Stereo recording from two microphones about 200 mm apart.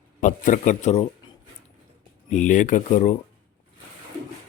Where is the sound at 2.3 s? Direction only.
40° left (ahead or behind).